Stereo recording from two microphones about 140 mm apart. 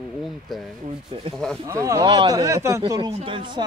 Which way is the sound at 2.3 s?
25° right (ahead or behind).